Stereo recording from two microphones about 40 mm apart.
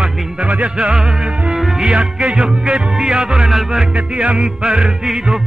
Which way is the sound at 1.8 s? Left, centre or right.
Right.